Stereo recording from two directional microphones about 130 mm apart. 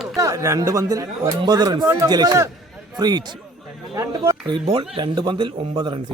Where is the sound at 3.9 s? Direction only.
25° right (ahead or behind).